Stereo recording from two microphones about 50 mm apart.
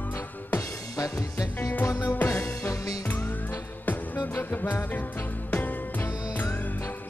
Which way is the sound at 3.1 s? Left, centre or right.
Left.